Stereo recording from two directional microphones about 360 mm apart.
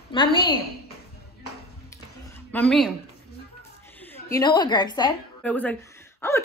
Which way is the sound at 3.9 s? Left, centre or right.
Centre.